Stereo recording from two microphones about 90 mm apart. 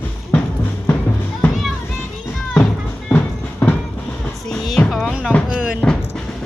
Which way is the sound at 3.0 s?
15° left (ahead or behind).